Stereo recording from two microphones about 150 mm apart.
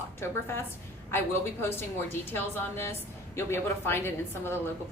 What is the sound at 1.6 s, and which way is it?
A woman's voice, 15° left (ahead or behind).